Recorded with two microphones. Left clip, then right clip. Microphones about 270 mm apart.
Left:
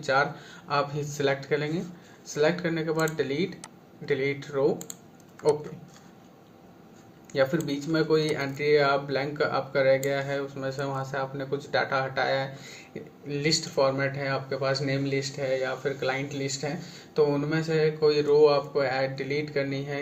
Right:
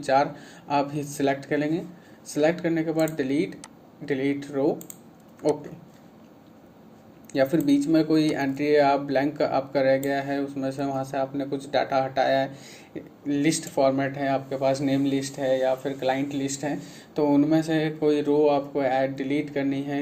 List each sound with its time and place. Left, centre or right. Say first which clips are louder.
0.0 s speech: right 3 dB; right
7.3 s speech: right 4 dB; right
18.0 s speech: left 1 dB; right